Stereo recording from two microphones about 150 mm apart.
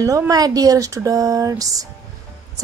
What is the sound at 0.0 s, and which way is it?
A woman's voice, 25° right (ahead or behind).